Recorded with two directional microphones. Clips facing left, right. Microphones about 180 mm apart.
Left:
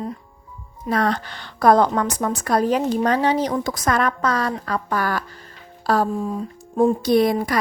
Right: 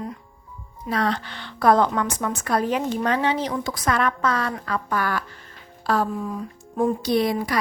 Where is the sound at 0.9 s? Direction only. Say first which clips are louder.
Left 3 dB; 45° left (ahead or behind); by 7.0 s 25° left (ahead or behind).